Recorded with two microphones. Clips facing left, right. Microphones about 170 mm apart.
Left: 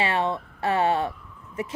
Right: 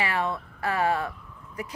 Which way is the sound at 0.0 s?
25° left (ahead or behind).